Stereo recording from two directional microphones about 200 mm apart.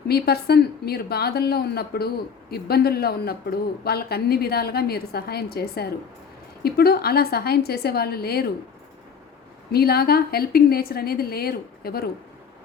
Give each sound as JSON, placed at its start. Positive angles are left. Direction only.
{"t": 0.1, "sound": "a woman's voice", "side_deg": 50}
{"t": 9.7, "sound": "a woman's voice", "side_deg": 50}